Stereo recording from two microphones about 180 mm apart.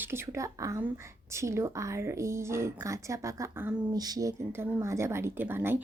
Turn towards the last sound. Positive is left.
turn(degrees=-10)  # may be behind; listen again after turning